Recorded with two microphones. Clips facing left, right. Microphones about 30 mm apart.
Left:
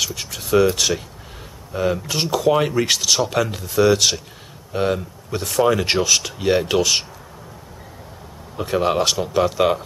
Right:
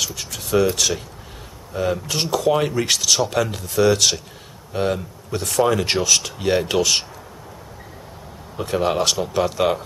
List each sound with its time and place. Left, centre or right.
0.0 s a sound: centre
0.4 s speech: centre
8.5 s speech: centre